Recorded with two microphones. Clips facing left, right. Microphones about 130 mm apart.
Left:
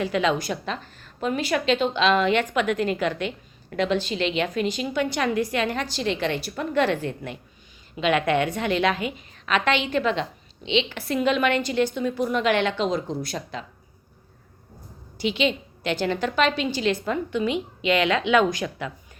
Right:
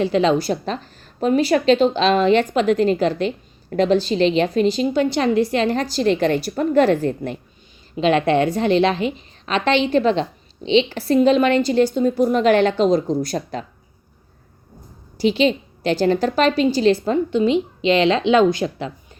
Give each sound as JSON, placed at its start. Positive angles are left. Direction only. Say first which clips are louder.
{"t": 0.0, "sound": "a woman's voice", "louder": "right 6 dB", "side_deg": -30}
{"t": 15.2, "sound": "a woman's voice", "louder": "right 7 dB", "side_deg": -35}